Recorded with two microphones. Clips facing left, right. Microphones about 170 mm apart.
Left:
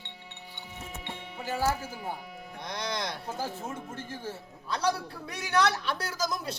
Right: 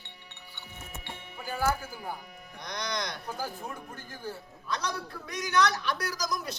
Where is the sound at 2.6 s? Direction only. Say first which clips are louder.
Left 1 dB; 25° left (ahead or behind).